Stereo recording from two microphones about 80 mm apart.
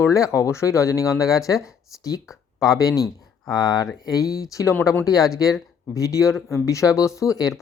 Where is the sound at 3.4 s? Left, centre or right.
Left.